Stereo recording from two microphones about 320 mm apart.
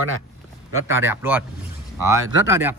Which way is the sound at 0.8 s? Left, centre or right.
Centre.